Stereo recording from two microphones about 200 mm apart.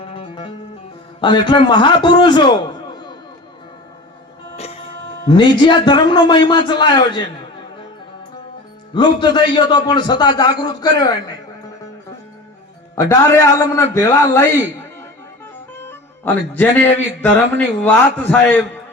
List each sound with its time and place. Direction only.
0.0 s music: 25° left (ahead or behind)
1.2 s a man's voice: 25° left (ahead or behind)
4.5 s a man's voice: 30° left (ahead or behind)
9.0 s a man's voice: 25° left (ahead or behind)
13.1 s a man's voice: 15° left (ahead or behind)
15.9 s a man's voice: 10° left (ahead or behind)